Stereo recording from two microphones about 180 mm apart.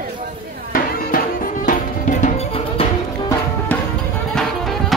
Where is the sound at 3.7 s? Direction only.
10° left (ahead or behind).